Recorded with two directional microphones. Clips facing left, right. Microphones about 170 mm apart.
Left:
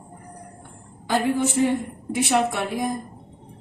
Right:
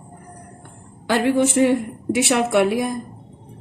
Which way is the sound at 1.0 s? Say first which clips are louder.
Right 4 dB; 85° right.